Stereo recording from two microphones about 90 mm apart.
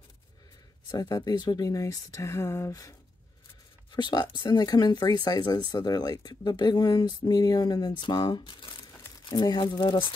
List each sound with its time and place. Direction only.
0.9 s speech: 45° left (ahead or behind)
3.9 s speech: 55° left (ahead or behind)